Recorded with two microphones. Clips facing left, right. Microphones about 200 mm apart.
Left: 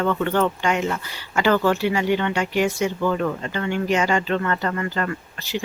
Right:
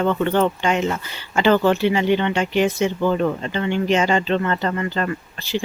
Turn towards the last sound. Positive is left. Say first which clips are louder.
# right 3 dB
turn(degrees=-25)  # may be behind; listen again after turning